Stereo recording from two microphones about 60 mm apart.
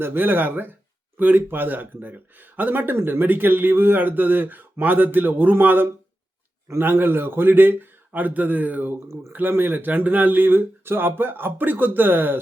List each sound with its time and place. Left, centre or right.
0.0 s speech: right